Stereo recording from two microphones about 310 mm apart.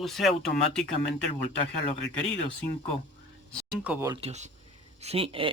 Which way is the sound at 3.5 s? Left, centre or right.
Centre.